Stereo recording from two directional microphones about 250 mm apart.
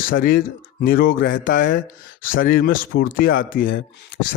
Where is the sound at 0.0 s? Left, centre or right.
Left.